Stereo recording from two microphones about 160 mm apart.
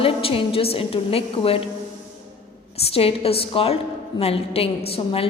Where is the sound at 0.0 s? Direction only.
35° left (ahead or behind).